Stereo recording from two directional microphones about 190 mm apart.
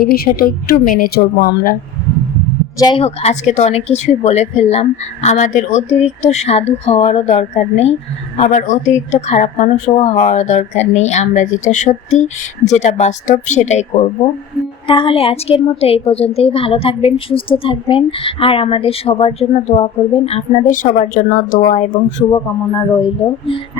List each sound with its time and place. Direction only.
0.0 s a woman's voice: 50° left (ahead or behind)
2.7 s a woman's voice: 25° left (ahead or behind); by 22.0 s 40° left (ahead or behind)
22.3 s a woman's voice: 25° left (ahead or behind)